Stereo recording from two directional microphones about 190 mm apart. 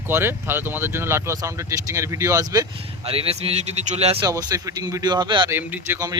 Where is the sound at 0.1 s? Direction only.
10° right (ahead or behind).